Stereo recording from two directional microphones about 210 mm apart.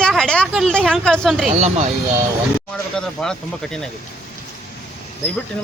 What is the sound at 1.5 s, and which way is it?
Speech, 30° right (ahead or behind).